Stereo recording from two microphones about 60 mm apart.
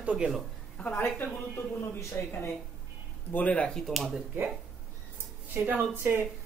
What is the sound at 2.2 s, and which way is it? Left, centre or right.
Speech, left.